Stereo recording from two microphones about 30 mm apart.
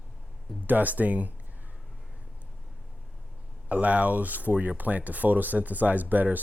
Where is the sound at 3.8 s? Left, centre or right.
Right.